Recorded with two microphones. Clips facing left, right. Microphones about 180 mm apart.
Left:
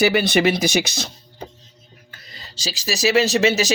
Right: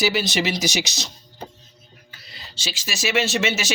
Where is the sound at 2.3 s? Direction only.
40° left (ahead or behind).